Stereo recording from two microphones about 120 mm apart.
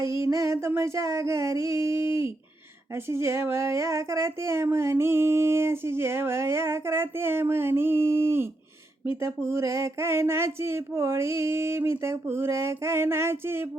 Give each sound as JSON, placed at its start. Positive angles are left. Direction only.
{"t": 0.1, "sound": "speech", "side_deg": -25}